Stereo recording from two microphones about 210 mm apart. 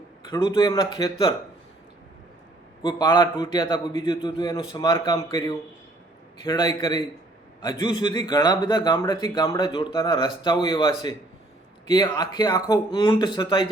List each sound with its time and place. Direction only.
0.3 s a man's voice: 20° left (ahead or behind)
2.8 s a man's voice: 20° left (ahead or behind)